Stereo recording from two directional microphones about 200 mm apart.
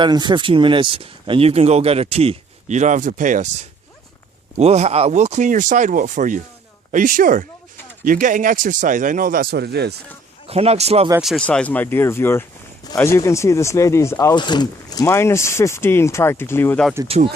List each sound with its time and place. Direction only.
0.0 s speech: 20° right (ahead or behind); by 9.9 s 55° right (ahead or behind)
10.4 s speech: 30° right (ahead or behind)
11.2 s speech: centre (ahead or behind)
17.1 s speech: 30° right (ahead or behind)